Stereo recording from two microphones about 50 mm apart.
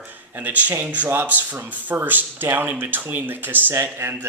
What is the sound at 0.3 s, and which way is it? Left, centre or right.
A man's voice, right.